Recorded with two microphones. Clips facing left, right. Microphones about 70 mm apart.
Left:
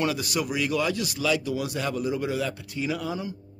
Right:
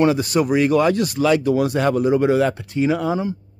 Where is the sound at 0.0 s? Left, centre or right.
Right.